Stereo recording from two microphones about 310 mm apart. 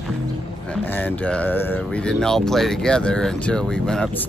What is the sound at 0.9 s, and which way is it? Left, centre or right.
Speech, centre.